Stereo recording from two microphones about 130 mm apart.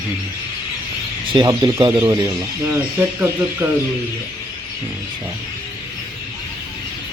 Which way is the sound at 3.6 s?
20° right (ahead or behind).